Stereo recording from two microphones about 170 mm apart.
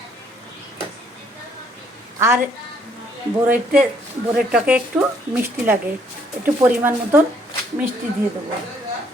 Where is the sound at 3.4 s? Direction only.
10° right (ahead or behind).